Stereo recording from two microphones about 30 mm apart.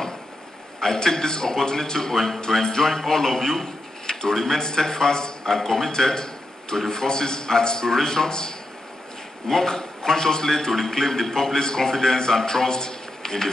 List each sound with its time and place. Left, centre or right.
0.7 s a man's voice: centre
4.6 s a man's voice: centre